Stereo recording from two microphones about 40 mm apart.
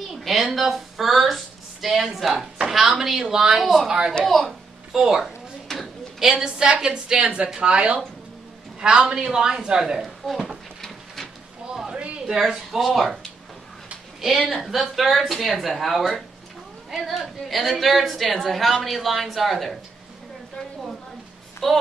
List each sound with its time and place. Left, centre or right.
0.1 s a sound: centre
0.6 s speech: centre
4.3 s a woman's voice: centre
4.9 s a woman's voice: centre
10.0 s a sound: centre
11.9 s a sound: right
12.3 s a woman's voice: centre
14.5 s a woman's voice: centre
21.6 s a woman's voice: centre